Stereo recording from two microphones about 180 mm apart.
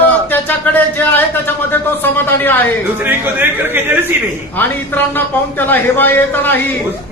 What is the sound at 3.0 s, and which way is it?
Speech, 10° right (ahead or behind).